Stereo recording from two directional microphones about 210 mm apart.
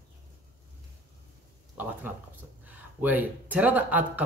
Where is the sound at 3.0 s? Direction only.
5° right (ahead or behind).